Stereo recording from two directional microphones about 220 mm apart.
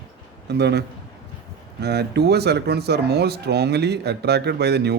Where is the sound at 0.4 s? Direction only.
50° right (ahead or behind).